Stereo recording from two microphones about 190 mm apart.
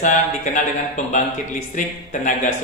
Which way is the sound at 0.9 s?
40° left (ahead or behind).